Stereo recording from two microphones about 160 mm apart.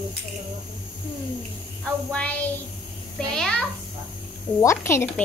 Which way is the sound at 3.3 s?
5° left (ahead or behind).